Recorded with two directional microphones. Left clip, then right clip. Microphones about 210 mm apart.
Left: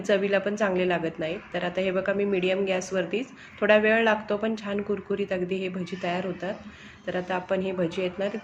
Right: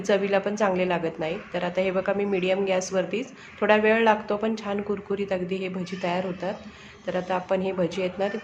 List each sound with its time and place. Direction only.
0.0 s a woman's voice: 5° right (ahead or behind)